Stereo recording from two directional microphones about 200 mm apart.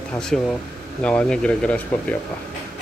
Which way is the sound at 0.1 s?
5° left (ahead or behind).